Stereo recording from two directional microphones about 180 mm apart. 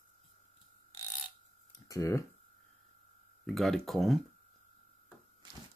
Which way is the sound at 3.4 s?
Centre (ahead or behind).